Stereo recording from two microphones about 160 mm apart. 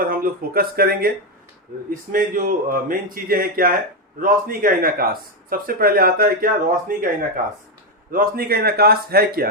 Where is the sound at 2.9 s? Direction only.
65° right (ahead or behind).